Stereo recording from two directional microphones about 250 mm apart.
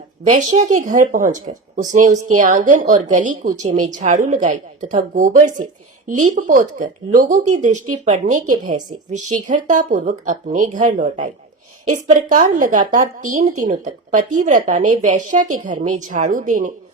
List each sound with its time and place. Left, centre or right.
0.3 s a woman's voice: right